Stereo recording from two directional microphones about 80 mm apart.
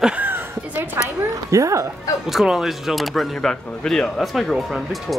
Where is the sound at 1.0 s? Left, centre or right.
Right.